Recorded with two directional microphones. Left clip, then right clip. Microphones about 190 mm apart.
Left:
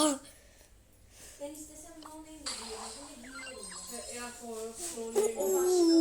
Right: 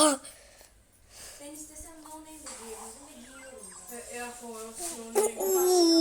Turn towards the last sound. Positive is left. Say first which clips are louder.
# right 3 dB
turn(degrees=-5)  # may be behind; listen again after turning